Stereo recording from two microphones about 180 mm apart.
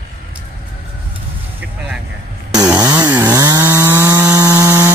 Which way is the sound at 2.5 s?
20° right (ahead or behind).